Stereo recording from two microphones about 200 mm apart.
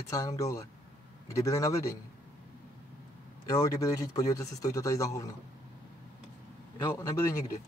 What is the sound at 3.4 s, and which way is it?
A man's voice, 15° left (ahead or behind).